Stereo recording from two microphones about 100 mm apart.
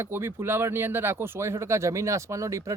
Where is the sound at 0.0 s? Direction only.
25° right (ahead or behind).